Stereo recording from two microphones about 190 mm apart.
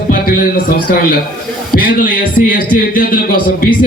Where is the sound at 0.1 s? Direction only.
50° left (ahead or behind).